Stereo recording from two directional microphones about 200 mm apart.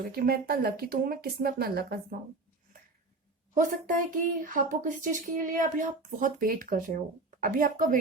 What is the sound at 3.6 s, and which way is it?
A woman's voice, 40° right (ahead or behind).